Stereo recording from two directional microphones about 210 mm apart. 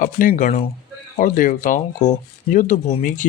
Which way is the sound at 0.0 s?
40° left (ahead or behind).